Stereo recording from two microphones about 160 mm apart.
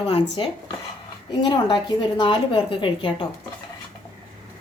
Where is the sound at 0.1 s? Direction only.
35° left (ahead or behind).